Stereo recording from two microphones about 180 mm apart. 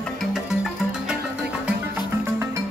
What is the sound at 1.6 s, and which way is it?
Music, 15° right (ahead or behind).